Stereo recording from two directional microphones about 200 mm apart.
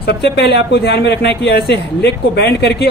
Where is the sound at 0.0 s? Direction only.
55° left (ahead or behind).